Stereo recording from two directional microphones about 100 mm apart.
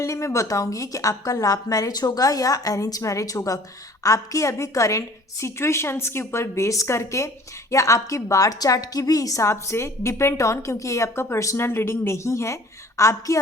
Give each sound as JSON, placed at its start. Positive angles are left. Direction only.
{"t": 0.0, "sound": "a woman's voice", "side_deg": 30}